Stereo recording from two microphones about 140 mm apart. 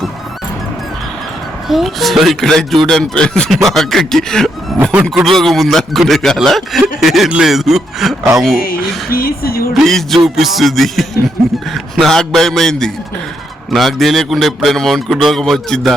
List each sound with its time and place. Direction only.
1.6 s speech: centre (ahead or behind)
4.8 s speech: 10° right (ahead or behind)
5.0 s speech: centre (ahead or behind)
9.0 s speech: 90° left
9.7 s speech: centre (ahead or behind)